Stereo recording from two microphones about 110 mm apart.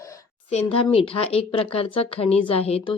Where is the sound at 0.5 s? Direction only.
60° left (ahead or behind).